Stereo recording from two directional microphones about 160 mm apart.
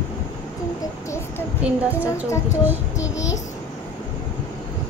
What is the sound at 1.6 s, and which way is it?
Speech, 10° right (ahead or behind).